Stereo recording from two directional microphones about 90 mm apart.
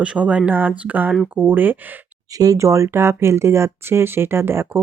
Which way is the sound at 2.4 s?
40° right (ahead or behind).